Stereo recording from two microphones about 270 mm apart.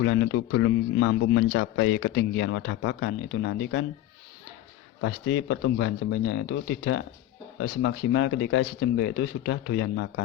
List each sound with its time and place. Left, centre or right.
0.0 s a man's voice: left
4.9 s a man's voice: left